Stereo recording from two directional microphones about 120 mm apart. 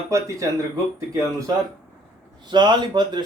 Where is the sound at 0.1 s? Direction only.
25° right (ahead or behind).